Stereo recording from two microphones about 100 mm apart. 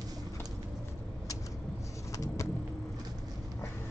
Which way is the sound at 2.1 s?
35° left (ahead or behind).